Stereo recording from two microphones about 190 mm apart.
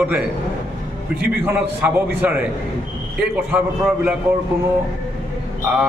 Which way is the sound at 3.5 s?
5° right (ahead or behind).